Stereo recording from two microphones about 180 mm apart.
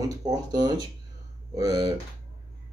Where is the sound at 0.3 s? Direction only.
20° right (ahead or behind).